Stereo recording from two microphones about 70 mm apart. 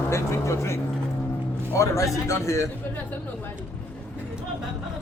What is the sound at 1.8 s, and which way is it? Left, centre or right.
Speech, left.